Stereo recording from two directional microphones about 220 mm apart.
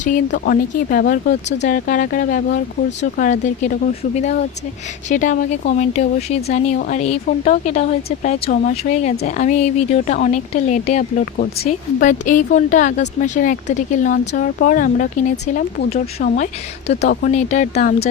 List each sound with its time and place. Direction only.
0.3 s speech: 45° left (ahead or behind)